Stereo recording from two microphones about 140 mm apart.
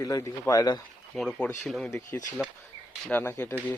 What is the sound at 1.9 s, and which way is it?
Speech, 20° left (ahead or behind).